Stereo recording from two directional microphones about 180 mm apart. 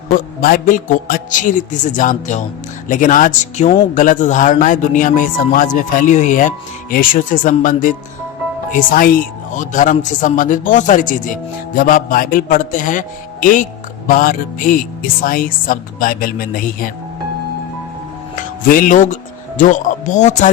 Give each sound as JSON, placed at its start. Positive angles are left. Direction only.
{"t": 0.1, "sound": "a man's voice", "side_deg": 50}
{"t": 18.7, "sound": "a man's voice", "side_deg": 50}